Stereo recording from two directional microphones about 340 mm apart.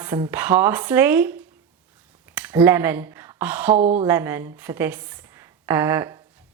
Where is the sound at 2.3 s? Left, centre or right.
Centre.